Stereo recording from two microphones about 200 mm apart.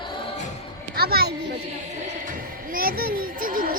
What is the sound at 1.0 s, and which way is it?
Children playing, 50° right (ahead or behind).